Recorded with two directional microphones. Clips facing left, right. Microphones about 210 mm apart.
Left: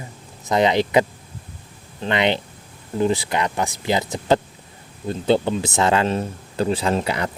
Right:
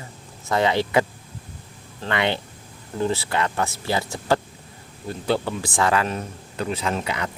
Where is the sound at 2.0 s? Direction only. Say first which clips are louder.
Left 3 dB; 20° left (ahead or behind).